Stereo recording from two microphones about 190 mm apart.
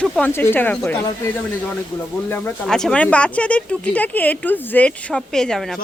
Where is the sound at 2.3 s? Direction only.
10° left (ahead or behind).